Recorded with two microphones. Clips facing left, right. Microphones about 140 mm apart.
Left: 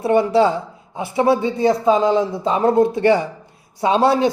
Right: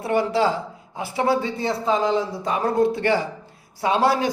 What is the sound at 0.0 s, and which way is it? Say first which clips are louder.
Speech: left 6 dB; 25° left (ahead or behind).